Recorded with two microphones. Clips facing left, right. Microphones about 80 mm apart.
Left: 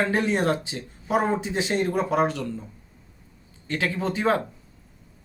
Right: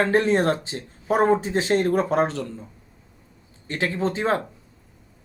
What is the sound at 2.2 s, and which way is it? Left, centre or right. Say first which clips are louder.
Speech: even; right.